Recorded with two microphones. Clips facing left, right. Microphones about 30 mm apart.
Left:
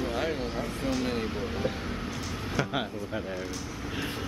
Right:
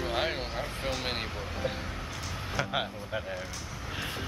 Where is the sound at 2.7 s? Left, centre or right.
Centre.